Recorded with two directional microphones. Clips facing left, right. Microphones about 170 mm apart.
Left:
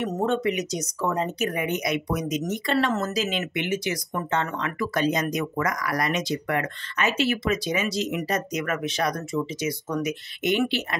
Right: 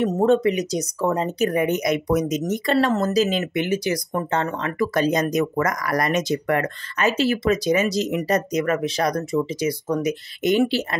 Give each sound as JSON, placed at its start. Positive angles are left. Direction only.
{"t": 0.0, "sound": "speech", "side_deg": -35}